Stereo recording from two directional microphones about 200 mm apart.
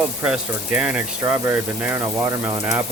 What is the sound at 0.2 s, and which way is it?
Speech, 5° right (ahead or behind).